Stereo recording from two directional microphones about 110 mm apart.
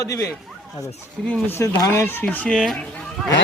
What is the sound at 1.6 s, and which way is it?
A man's voice, 25° left (ahead or behind).